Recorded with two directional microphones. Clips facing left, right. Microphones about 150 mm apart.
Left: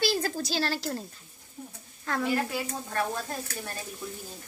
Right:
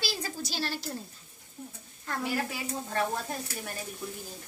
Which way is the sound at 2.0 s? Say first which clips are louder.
Left 4 dB; 90° left.